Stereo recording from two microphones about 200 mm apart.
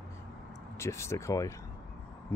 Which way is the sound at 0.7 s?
15° left (ahead or behind).